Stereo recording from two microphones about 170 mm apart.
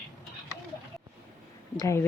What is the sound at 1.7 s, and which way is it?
Speech, 20° left (ahead or behind).